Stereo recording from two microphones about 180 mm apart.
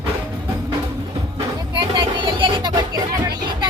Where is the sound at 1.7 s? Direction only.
25° right (ahead or behind).